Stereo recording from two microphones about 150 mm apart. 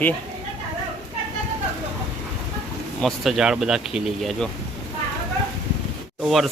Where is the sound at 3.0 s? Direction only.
Centre (ahead or behind).